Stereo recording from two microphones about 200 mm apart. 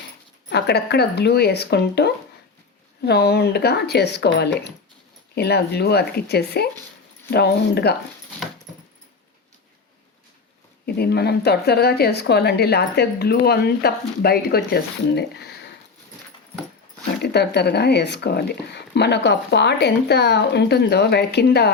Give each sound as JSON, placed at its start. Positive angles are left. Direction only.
{"t": 0.5, "sound": "speech", "side_deg": 55}
{"t": 10.8, "sound": "speech", "side_deg": 50}
{"t": 17.2, "sound": "speech", "side_deg": 55}